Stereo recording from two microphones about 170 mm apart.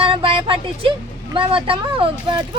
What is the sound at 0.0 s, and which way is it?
Speech, 30° right (ahead or behind).